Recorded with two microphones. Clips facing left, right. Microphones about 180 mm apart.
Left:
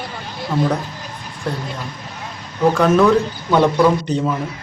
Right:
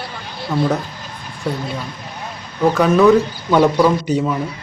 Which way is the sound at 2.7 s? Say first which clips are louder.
Right 3 dB; 5° right (ahead or behind).